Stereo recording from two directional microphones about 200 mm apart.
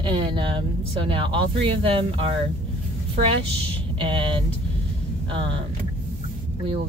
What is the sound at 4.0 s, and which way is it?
Speech, 25° right (ahead or behind).